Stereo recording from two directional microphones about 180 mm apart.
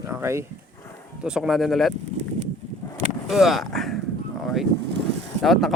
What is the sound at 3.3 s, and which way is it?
Speech, centre (ahead or behind).